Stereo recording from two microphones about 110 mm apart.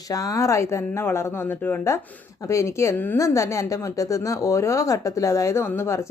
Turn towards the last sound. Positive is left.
turn(degrees=25)  # may be behind; listen again after turning